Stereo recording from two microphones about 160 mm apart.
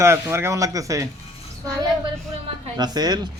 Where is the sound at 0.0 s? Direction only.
15° right (ahead or behind).